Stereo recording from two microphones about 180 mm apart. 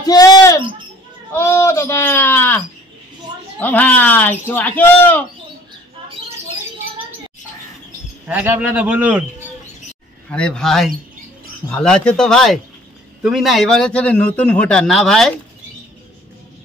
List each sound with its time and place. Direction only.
0.0 s a sound: 20° left (ahead or behind)
1.3 s speech: 15° left (ahead or behind)
8.3 s speech: 5° right (ahead or behind)
10.3 s a man's voice: 5° left (ahead or behind)